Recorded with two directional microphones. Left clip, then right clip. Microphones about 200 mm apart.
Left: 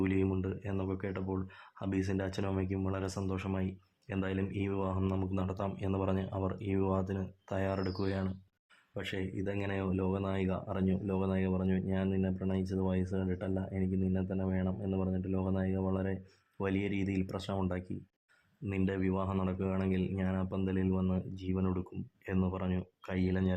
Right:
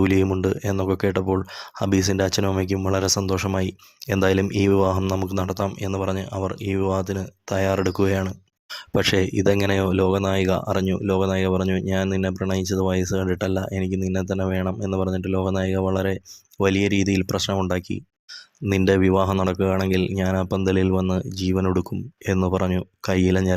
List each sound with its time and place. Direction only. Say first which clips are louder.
0.0 s speech: right 13 dB; 40° right (ahead or behind)